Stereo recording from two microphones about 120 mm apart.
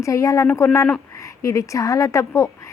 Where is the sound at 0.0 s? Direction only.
25° left (ahead or behind).